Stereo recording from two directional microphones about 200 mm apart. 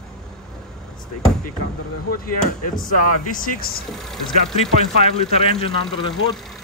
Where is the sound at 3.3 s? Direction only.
45° left (ahead or behind).